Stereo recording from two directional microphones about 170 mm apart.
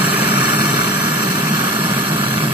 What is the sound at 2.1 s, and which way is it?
Vehicle, 10° right (ahead or behind).